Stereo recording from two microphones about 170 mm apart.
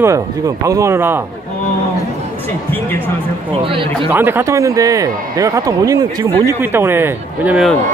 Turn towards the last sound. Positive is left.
turn(degrees=-10)  # may be behind; listen again after turning